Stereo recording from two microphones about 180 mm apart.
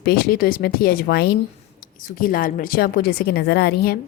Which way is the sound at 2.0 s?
50° left (ahead or behind).